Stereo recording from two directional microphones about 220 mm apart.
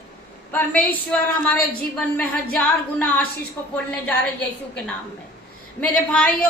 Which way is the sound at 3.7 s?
5° left (ahead or behind).